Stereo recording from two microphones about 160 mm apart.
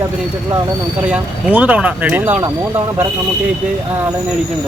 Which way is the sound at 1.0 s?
10° right (ahead or behind).